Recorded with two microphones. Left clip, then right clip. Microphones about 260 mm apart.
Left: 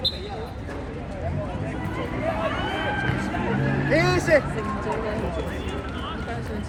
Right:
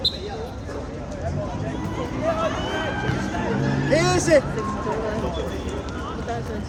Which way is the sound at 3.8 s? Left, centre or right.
Right.